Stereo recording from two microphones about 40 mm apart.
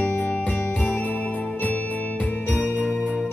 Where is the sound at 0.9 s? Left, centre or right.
Left.